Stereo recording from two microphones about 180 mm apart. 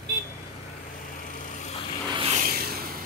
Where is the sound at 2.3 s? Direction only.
55° right (ahead or behind).